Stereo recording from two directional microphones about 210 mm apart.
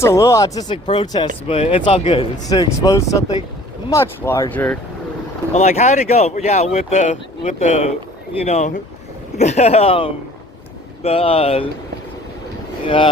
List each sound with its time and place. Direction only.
0.0 s speech: 15° left (ahead or behind)
2.5 s speech: 15° left (ahead or behind)
5.5 s speech: 30° left (ahead or behind)